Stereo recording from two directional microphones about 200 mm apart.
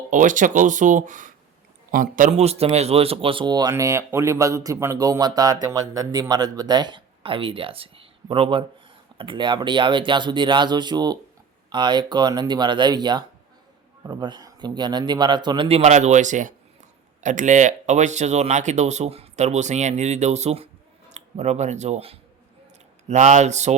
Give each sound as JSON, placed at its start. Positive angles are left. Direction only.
{"t": 0.1, "sound": "a man's voice", "side_deg": -40}
{"t": 15.8, "sound": "speech", "side_deg": -35}